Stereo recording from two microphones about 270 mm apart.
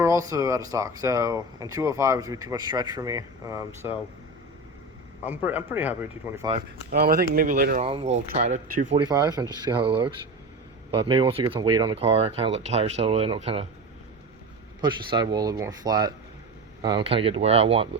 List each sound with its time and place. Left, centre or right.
0.0 s speech: centre
5.2 s speech: centre
6.9 s speech: right
14.8 s speech: centre